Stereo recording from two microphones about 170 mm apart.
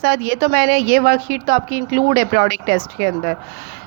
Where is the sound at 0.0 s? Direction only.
70° right (ahead or behind).